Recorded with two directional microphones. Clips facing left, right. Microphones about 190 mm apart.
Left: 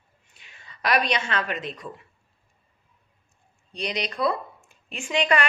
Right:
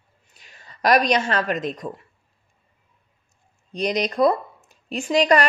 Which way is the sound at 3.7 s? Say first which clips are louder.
Right 7 dB; 45° right (ahead or behind).